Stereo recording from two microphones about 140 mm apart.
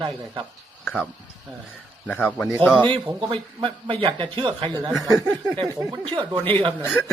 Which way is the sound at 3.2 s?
40° right (ahead or behind).